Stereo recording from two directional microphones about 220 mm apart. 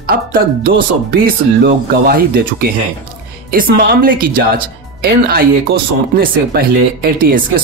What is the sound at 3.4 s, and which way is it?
A woman's voice, 40° right (ahead or behind).